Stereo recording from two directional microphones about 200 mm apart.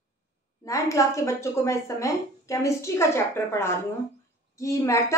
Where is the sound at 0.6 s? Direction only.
15° left (ahead or behind).